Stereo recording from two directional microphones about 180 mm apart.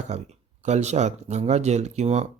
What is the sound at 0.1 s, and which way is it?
Speech, 40° right (ahead or behind).